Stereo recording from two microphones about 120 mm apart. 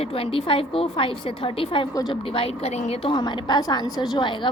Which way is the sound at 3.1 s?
35° left (ahead or behind).